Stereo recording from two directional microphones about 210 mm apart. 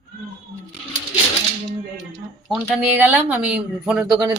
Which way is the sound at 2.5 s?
5° right (ahead or behind).